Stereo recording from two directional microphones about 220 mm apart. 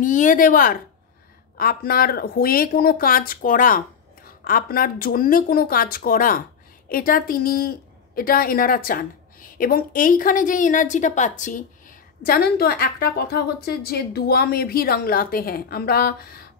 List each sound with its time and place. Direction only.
0.0 s a woman's voice: 35° left (ahead or behind)